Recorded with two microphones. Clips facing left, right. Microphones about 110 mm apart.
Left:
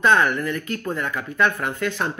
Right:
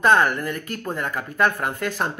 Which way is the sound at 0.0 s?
40° right (ahead or behind).